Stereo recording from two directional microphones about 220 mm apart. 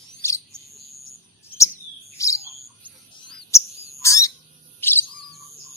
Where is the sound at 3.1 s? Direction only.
15° left (ahead or behind).